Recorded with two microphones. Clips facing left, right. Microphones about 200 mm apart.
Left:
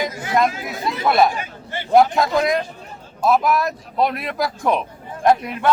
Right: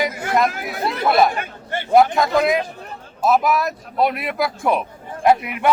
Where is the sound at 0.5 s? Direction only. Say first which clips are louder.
Right 1 dB; 60° right (ahead or behind).